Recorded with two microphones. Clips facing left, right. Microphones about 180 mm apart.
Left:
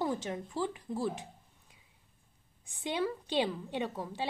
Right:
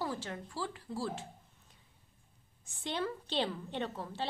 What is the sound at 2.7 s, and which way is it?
A woman's voice, 15° left (ahead or behind).